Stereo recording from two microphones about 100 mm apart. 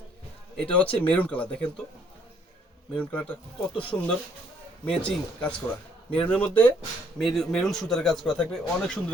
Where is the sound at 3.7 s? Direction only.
60° left (ahead or behind).